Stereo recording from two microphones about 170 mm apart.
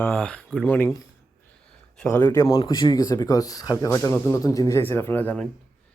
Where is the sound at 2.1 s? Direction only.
15° left (ahead or behind).